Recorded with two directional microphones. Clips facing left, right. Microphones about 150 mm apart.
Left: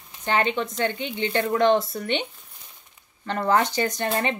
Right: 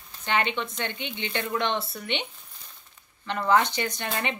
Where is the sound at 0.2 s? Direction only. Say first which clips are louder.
Left 4 dB; 40° left (ahead or behind).